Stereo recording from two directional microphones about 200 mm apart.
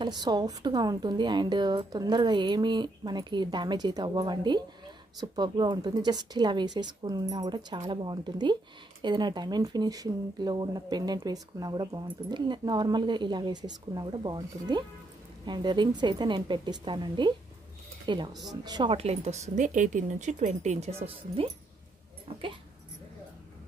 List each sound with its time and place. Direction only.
0.0 s a woman's voice: 20° right (ahead or behind)